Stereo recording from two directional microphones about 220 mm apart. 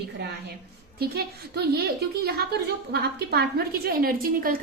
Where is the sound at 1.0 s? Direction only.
45° right (ahead or behind).